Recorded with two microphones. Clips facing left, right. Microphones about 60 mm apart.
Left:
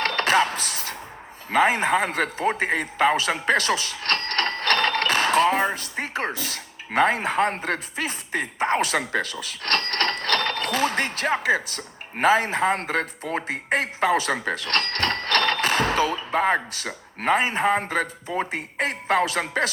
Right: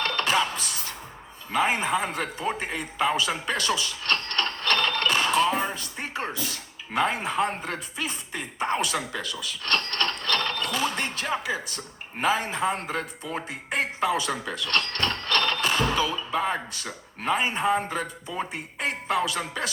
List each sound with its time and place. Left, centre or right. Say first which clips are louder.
0.0 s music: left 4 dB; left
1.6 s a man's voice: left 4 dB; left
1.9 s a man's voice: left 4 dB; left
3.2 s a sound: left 5 dB; left
7.3 s a man's voice: left 4 dB; left